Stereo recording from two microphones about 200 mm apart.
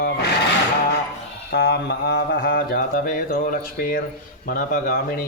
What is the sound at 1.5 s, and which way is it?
Speech, 55° left (ahead or behind).